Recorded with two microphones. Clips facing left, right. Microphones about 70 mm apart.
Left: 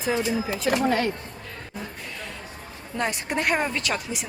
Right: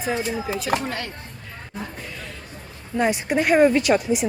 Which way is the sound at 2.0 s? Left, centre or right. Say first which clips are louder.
Right 1 dB; centre.